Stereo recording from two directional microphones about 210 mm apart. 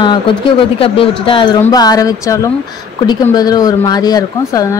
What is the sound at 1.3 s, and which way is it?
Speech, 20° left (ahead or behind).